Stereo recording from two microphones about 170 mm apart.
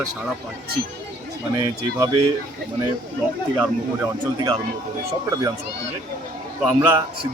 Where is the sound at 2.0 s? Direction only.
25° right (ahead or behind).